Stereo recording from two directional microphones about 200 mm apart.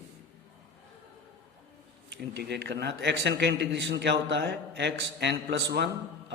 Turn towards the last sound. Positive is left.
turn(degrees=-60)  # may be behind; listen again after turning